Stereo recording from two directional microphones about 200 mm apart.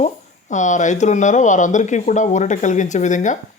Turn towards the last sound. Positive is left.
turn(degrees=40)  # may be behind; listen again after turning